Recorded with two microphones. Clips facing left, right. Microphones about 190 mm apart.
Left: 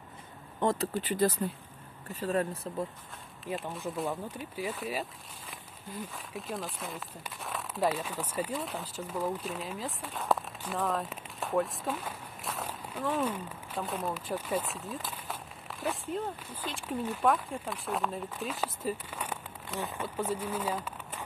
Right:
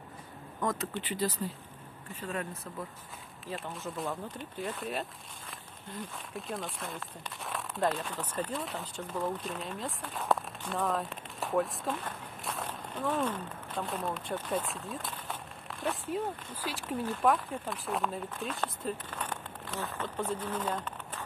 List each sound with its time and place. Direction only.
0.6 s speech: 30° left (ahead or behind)
3.5 s speech: 15° left (ahead or behind)
4.4 s speech: 5° left (ahead or behind)
16.8 s speech: 10° left (ahead or behind)